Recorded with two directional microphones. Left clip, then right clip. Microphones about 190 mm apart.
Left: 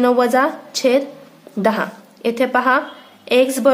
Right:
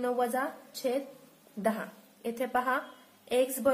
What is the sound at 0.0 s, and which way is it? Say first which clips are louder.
A woman's voice: left 16 dB; 20° left (ahead or behind).